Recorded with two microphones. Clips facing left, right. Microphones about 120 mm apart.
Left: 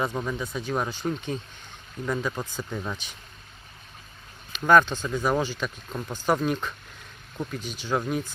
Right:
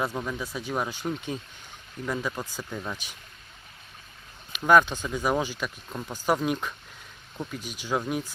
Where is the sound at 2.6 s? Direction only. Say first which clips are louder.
Left 3 dB; 5° left (ahead or behind).